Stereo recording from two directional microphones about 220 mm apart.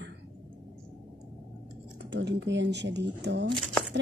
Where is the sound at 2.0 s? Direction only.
50° right (ahead or behind).